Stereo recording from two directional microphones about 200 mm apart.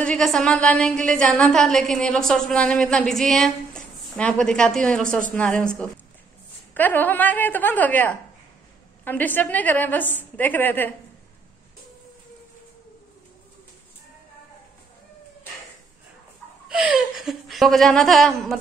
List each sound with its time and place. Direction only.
0.0 s a woman's voice: 5° left (ahead or behind)
6.7 s a woman's voice: 10° left (ahead or behind)
16.6 s a woman's voice: 5° right (ahead or behind)